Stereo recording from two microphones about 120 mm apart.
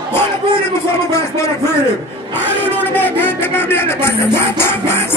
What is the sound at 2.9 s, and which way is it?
Speech, 15° left (ahead or behind).